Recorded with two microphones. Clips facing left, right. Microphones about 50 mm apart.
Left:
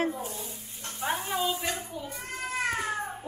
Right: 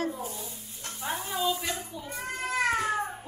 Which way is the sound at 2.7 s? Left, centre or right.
Centre.